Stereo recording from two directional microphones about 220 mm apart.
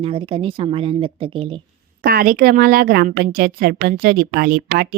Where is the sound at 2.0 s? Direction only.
40° right (ahead or behind).